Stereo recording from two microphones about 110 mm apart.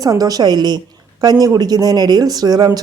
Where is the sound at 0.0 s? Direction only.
35° right (ahead or behind).